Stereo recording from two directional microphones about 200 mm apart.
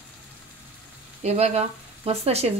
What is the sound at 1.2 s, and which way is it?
Speech, 30° right (ahead or behind).